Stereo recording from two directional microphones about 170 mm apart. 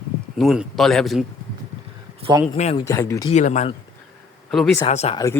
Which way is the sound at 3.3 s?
45° left (ahead or behind).